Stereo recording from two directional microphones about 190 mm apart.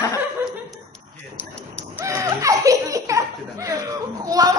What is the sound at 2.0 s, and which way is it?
Laughter, 15° right (ahead or behind).